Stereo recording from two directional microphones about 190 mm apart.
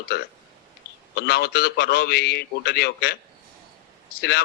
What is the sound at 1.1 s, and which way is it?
A man's voice, 60° left (ahead or behind).